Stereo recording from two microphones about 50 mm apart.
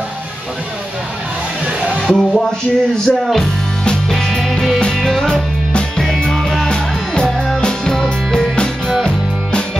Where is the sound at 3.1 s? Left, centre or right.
Centre.